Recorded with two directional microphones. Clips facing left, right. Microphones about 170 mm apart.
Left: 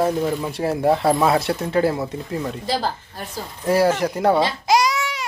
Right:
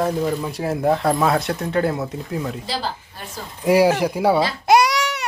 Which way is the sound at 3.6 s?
15° right (ahead or behind).